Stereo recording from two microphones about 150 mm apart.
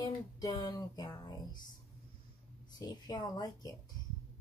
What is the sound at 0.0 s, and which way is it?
Speech, 25° left (ahead or behind).